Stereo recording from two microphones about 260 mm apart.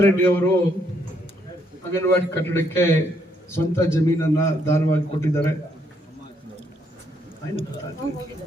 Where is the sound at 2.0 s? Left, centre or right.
Centre.